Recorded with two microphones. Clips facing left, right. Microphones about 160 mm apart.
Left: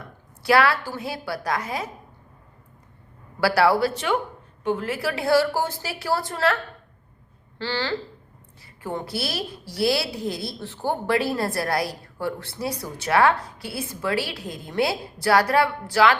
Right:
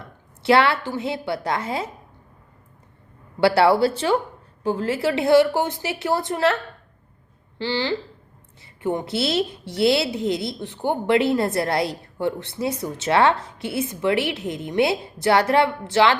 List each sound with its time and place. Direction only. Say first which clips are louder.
0.4 s a woman's voice: right 2 dB; 25° right (ahead or behind)
3.4 s a woman's voice: right 3 dB; 25° right (ahead or behind)
7.6 s a woman's voice: right 3 dB; 20° right (ahead or behind)